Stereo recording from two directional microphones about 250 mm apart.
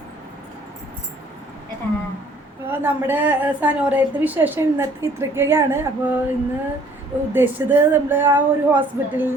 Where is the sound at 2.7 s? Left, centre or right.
Centre.